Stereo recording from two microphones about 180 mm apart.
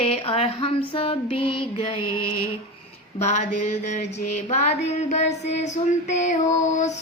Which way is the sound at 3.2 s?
40° left (ahead or behind).